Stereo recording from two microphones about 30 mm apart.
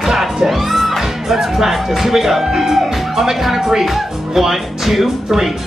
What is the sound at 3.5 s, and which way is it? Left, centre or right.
Speech, centre.